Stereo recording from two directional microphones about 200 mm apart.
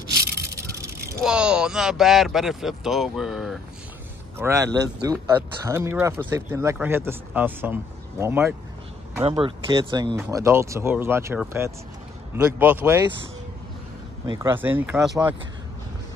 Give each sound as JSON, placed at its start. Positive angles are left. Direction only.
{"t": 0.4, "sound": "vehicle", "side_deg": -15}
{"t": 1.2, "sound": "speech", "side_deg": -5}
{"t": 4.4, "sound": "speech", "side_deg": -15}
{"t": 9.3, "sound": "speech", "side_deg": -25}
{"t": 14.2, "sound": "speech", "side_deg": -20}
{"t": 14.5, "sound": "speech", "side_deg": -10}